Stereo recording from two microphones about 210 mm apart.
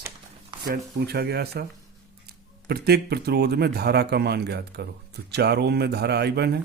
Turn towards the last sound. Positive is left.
turn(degrees=-50)  # may be behind; listen again after turning